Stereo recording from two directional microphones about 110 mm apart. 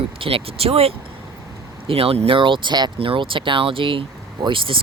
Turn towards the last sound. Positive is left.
turn(degrees=-50)  # may be behind; listen again after turning